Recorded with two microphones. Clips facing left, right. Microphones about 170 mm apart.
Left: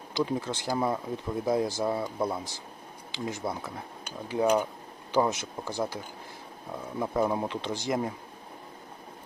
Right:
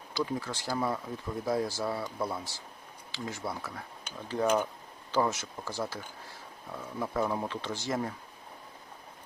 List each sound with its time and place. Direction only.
0.1 s speech: 20° left (ahead or behind)
7.0 s speech: 20° left (ahead or behind)